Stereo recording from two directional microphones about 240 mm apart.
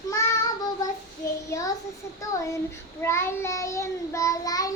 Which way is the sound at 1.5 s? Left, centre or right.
Centre.